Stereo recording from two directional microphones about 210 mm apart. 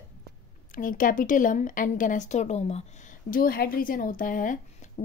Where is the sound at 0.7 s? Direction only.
40° left (ahead or behind).